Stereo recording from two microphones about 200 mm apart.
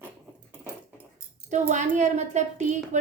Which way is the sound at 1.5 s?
35° right (ahead or behind).